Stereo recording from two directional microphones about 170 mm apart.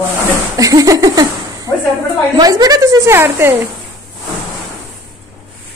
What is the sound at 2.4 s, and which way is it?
A woman's voice, 20° right (ahead or behind).